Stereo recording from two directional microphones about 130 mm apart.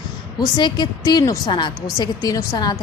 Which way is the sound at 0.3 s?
35° left (ahead or behind).